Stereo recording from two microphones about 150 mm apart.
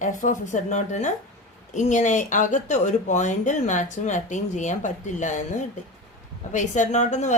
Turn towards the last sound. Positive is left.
turn(degrees=50)  # may be behind; listen again after turning